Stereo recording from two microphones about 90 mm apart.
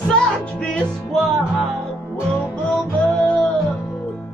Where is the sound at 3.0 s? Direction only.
15° left (ahead or behind).